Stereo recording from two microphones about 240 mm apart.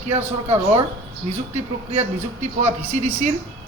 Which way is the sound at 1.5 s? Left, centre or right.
Right.